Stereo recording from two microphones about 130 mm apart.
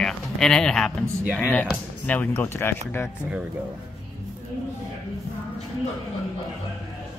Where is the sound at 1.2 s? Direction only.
5° right (ahead or behind).